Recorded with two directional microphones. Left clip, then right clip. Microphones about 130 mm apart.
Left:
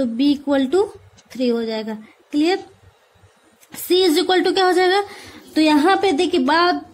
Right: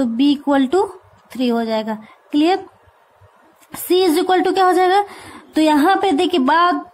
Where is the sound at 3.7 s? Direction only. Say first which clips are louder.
Right 1 dB; 5° left (ahead or behind).